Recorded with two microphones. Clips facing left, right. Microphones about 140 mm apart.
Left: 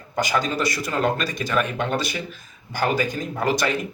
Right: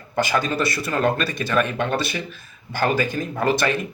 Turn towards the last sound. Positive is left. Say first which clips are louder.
# right 2 dB
turn(degrees=15)  # may be behind; listen again after turning